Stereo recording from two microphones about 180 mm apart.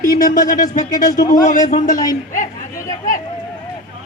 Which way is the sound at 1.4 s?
45° left (ahead or behind).